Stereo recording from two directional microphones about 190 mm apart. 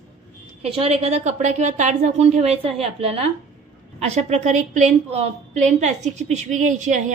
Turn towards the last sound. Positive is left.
turn(degrees=-40)  # may be behind; listen again after turning